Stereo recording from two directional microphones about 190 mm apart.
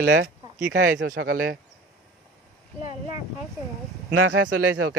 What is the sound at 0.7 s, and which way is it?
Speech, 70° right (ahead or behind).